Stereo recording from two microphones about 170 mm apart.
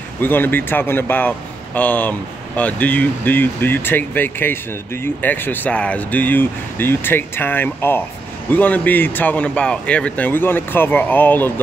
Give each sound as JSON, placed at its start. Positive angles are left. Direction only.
{"t": 0.2, "sound": "speech", "side_deg": 10}